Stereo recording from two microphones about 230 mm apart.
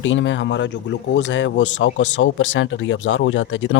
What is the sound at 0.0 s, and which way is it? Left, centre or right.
Speech, left.